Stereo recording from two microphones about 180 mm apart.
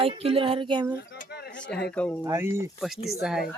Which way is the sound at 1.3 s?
65° left (ahead or behind).